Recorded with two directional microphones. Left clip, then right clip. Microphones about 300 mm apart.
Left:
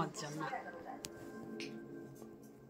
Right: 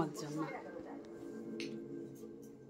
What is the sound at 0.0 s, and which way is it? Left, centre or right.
Speech, centre.